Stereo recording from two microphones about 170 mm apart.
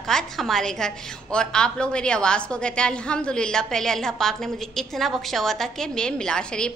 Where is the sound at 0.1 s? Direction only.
Centre (ahead or behind).